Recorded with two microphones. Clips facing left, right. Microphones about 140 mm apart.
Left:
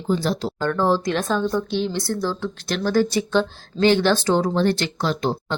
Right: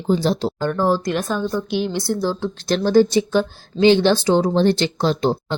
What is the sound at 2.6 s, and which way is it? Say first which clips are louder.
Speech: right 5 dB; 30° right (ahead or behind).